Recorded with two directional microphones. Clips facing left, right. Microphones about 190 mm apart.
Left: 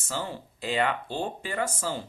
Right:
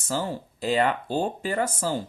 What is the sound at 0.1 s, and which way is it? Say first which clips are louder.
Speech: right 5 dB; 40° right (ahead or behind).